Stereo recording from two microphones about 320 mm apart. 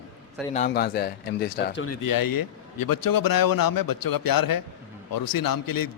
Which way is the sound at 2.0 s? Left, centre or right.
Left.